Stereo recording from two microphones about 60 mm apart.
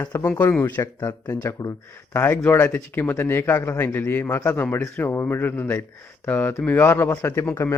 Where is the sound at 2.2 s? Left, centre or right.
Left.